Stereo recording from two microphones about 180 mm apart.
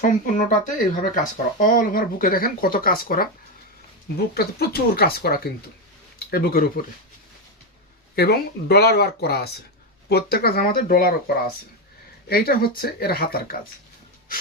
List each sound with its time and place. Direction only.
0.0 s speech: 45° left (ahead or behind)
4.4 s speech: 60° left (ahead or behind)
8.1 s speech: 60° left (ahead or behind)
12.3 s speech: 55° left (ahead or behind)